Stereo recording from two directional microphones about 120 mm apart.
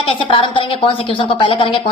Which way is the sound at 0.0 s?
50° left (ahead or behind).